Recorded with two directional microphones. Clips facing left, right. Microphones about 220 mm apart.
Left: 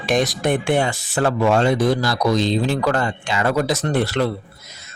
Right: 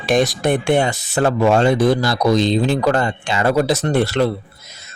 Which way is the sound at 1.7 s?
55° right (ahead or behind).